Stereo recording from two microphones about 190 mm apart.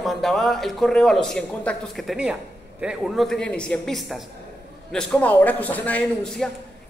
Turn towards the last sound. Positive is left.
turn(degrees=5)  # may be behind; listen again after turning